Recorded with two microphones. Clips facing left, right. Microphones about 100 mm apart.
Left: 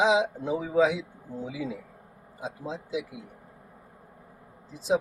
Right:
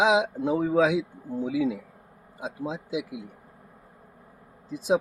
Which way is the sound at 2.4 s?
65° right (ahead or behind).